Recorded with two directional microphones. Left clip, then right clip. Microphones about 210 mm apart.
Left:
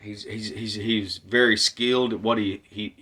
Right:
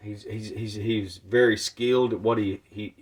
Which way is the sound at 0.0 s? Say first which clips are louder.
Left 3 dB; 20° left (ahead or behind).